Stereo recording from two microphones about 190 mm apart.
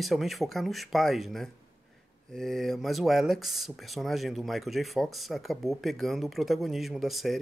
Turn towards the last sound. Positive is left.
turn(degrees=0)  # may be behind; listen again after turning